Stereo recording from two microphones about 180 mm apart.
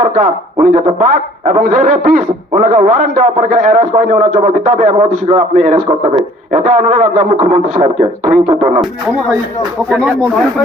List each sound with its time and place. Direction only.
0.0 s a man's voice: 50° right (ahead or behind)
9.9 s speech: centre (ahead or behind)